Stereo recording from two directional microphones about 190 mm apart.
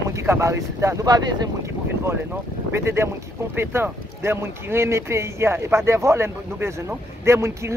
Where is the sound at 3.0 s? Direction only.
15° right (ahead or behind).